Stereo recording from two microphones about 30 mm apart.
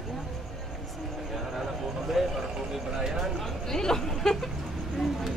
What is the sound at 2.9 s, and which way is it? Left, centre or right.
Speech, centre.